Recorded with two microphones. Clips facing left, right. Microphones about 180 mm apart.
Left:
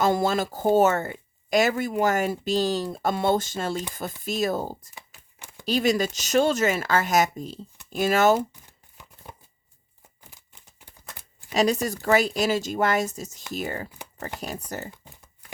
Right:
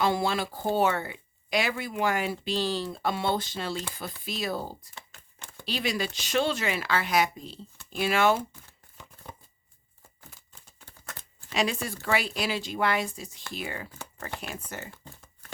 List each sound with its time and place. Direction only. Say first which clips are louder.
0.0 s speech: left 4 dB; 45° left (ahead or behind)
4.9 s a sound: left 1 dB; 15° left (ahead or behind)
5.6 s speech: left 8 dB; 45° left (ahead or behind)
10.2 s a sound: right 1 dB; 15° left (ahead or behind)
11.5 s speech: left 6 dB; 40° left (ahead or behind)
14.8 s crumpling: left 4 dB; 15° left (ahead or behind)